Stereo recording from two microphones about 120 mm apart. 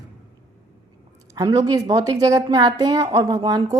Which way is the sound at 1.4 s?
30° right (ahead or behind).